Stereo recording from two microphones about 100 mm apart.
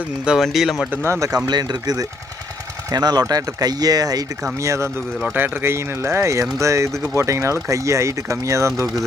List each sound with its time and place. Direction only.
0.3 s speech: centre (ahead or behind)
0.9 s speech: 25° right (ahead or behind)
1.5 s speech: 45° right (ahead or behind)
4.6 s speech: 30° right (ahead or behind)